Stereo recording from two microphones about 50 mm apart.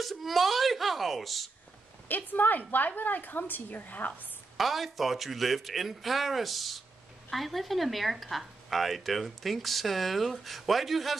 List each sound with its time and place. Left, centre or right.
0.0 s speech: centre
2.0 s a woman's voice: left
4.6 s speech: centre